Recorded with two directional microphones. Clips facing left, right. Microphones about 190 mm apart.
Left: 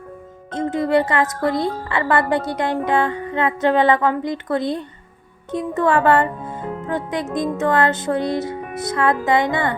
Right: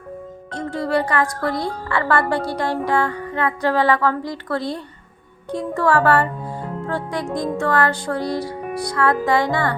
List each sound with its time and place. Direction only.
0.5 s music: 20° left (ahead or behind)
5.5 s speech: 20° left (ahead or behind)
7.6 s music: 20° left (ahead or behind)